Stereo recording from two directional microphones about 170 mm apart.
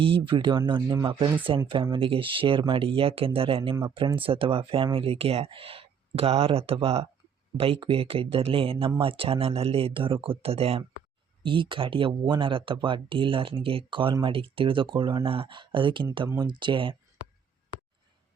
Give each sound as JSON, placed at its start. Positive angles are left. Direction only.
{"t": 0.0, "sound": "speech", "side_deg": -30}